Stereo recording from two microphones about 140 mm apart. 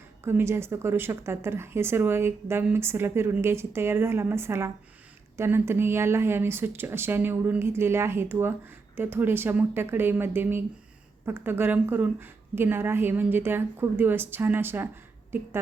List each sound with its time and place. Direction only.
0.3 s speech: 15° right (ahead or behind)